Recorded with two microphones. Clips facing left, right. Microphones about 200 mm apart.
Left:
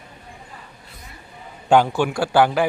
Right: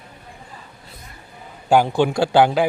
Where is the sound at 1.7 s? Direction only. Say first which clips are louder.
Right 1 dB; 15° right (ahead or behind).